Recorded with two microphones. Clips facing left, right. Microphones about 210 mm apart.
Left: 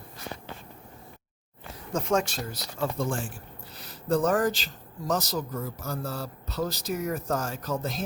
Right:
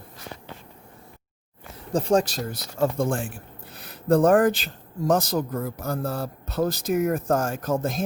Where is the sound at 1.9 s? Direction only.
30° right (ahead or behind).